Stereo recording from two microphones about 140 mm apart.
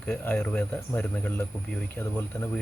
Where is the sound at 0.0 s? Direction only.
5° left (ahead or behind).